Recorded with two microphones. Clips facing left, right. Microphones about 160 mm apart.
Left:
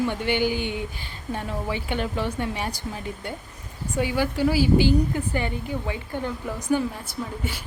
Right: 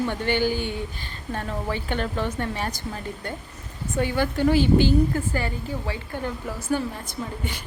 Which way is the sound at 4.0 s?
10° left (ahead or behind).